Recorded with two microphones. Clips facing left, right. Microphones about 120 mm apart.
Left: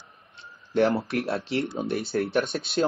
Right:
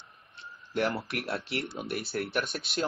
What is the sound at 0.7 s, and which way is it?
Speech, 30° left (ahead or behind).